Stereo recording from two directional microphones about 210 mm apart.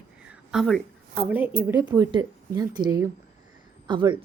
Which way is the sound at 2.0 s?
20° right (ahead or behind).